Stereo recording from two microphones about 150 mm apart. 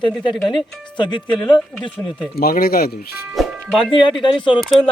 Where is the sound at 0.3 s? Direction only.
Centre (ahead or behind).